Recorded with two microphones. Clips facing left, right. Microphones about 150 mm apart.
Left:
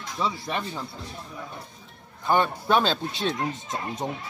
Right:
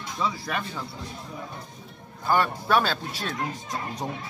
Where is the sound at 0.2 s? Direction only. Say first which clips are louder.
Left 1 dB; 25° left (ahead or behind).